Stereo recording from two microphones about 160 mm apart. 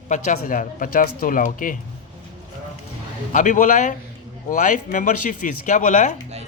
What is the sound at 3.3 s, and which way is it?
A man's voice, 50° left (ahead or behind).